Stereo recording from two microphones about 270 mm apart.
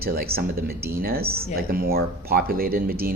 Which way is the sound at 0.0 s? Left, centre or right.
Right.